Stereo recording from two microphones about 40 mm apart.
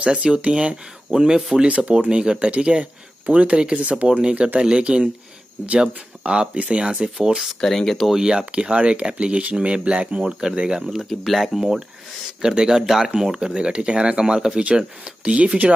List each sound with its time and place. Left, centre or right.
0.0 s speech: right
7.6 s speech: centre
8.1 s speech: centre
10.2 s speech: centre
11.1 s speech: centre; by 15.7 s right